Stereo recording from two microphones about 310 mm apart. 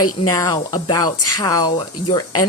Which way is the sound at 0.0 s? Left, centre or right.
Left.